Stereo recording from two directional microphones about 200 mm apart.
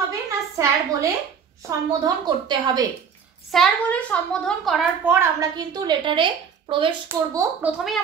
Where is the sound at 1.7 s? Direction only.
20° right (ahead or behind).